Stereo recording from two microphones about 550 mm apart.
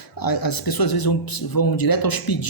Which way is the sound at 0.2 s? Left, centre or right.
Left.